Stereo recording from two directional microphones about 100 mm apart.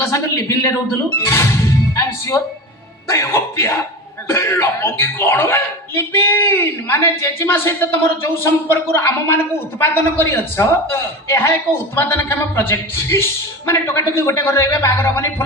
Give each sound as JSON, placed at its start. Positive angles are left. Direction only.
{"t": 0.1, "sound": "speech", "side_deg": 30}